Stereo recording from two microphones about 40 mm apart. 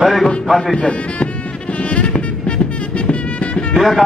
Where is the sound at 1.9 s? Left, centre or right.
Left.